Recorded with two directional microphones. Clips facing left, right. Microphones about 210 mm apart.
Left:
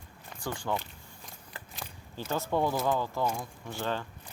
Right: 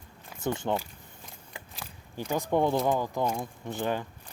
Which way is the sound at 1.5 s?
15° right (ahead or behind).